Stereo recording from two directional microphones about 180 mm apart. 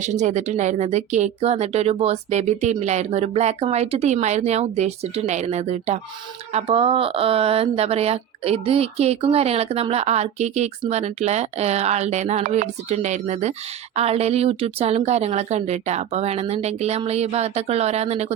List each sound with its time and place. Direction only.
0.0 s speech: 40° right (ahead or behind)